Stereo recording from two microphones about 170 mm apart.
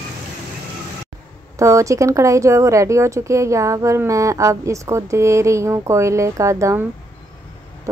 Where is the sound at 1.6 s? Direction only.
20° right (ahead or behind).